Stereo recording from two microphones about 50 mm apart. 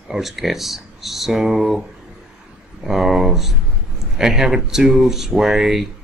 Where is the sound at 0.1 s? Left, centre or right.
Centre.